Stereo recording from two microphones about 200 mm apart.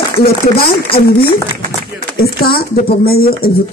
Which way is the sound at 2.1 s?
50° left (ahead or behind).